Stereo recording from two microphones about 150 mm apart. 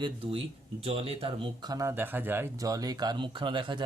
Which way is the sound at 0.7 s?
40° right (ahead or behind).